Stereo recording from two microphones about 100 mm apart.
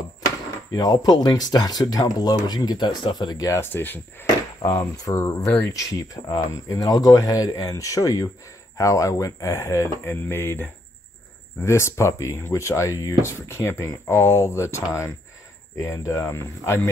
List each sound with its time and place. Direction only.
0.7 s speech: 40° left (ahead or behind)
3.5 s speech: 20° left (ahead or behind)
5.0 s speech: 30° left (ahead or behind)